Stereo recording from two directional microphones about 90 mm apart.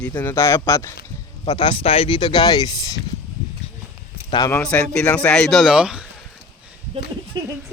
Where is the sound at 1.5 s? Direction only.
65° left (ahead or behind); by 2.9 s 45° left (ahead or behind).